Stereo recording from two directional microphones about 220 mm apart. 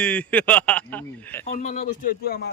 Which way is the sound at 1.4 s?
35° left (ahead or behind).